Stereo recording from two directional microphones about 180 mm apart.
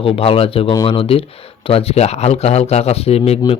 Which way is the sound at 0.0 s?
30° left (ahead or behind).